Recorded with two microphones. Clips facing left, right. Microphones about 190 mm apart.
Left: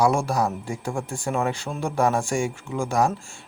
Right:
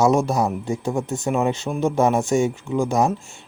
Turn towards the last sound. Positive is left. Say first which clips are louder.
# right 3 dB
turn(degrees=-20)  # may be behind; listen again after turning